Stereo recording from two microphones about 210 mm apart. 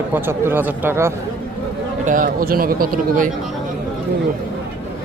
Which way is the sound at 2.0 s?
40° right (ahead or behind).